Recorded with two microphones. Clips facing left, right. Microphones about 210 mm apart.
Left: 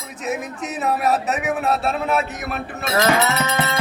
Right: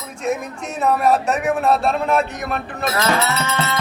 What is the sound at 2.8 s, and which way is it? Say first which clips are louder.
Music: left 2 dB; 15° left (ahead or behind).